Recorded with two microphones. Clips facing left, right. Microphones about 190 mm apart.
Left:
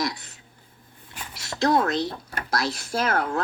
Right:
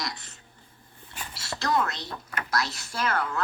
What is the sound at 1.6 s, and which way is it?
Speech, 55° left (ahead or behind).